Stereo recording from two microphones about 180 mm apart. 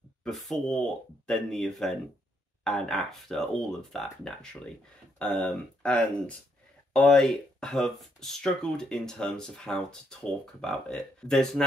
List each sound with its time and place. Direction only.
0.2 s speech: centre (ahead or behind)